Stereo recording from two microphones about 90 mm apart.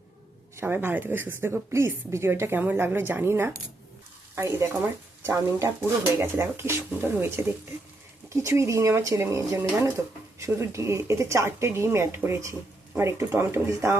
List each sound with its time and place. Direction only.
0.5 s a woman's voice: 25° right (ahead or behind)